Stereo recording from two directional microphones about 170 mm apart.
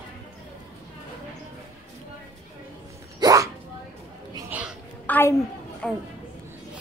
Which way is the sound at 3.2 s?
20° right (ahead or behind).